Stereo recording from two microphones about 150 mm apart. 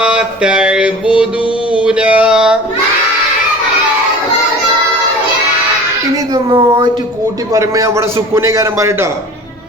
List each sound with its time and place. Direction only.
0.0 s mantra: 5° right (ahead or behind)
1.7 s a sound: 5° right (ahead or behind)
6.3 s a woman's voice: 30° right (ahead or behind)
7.5 s a man's voice: 20° right (ahead or behind)